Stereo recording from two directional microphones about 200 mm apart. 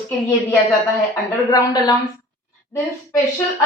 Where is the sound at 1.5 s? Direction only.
20° left (ahead or behind).